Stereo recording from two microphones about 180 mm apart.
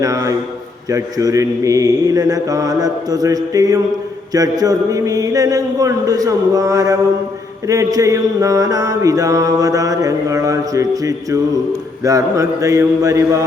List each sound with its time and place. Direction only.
0.0 s mantra: 20° right (ahead or behind)